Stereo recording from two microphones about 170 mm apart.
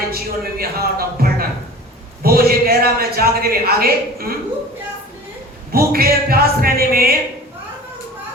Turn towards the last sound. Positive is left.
turn(degrees=-60)  # may be behind; listen again after turning